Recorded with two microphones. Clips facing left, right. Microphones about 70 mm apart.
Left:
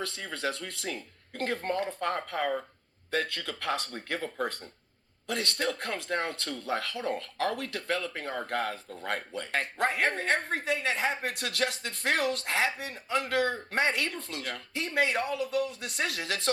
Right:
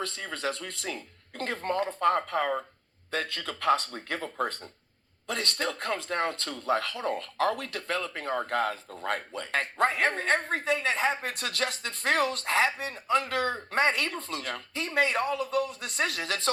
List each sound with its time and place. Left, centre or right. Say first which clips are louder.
0.0 s a woman's voice: right 1 dB; right
13.7 s a woman's voice: right 2 dB; right